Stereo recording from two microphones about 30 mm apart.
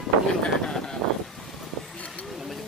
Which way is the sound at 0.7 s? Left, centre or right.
Left.